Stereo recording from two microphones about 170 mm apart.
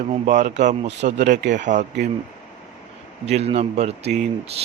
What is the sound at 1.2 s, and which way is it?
Speech, 90° right.